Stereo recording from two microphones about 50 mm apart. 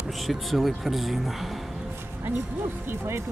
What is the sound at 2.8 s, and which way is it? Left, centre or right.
Speech, right.